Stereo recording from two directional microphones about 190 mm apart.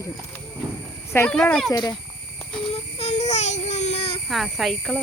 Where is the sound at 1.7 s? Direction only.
20° left (ahead or behind).